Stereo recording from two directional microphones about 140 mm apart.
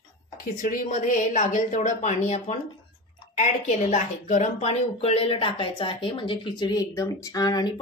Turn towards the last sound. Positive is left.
turn(degrees=25)  # may be behind; listen again after turning